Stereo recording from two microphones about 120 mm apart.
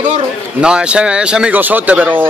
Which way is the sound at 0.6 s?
10° right (ahead or behind).